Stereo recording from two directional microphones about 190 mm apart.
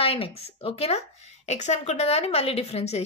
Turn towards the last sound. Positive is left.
turn(degrees=35)  # may be behind; listen again after turning